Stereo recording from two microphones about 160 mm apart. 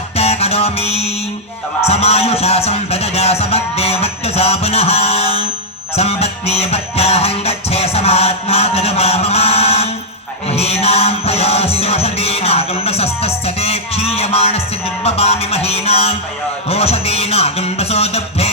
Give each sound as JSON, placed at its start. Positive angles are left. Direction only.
{"t": 0.2, "sound": "music", "side_deg": 40}